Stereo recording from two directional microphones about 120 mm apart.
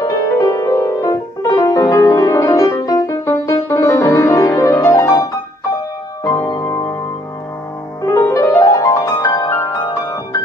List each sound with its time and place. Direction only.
0.0 s music: 25° left (ahead or behind)
8.0 s music: 25° left (ahead or behind)